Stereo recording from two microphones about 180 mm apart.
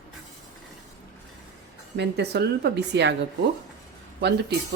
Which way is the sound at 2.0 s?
70° right (ahead or behind).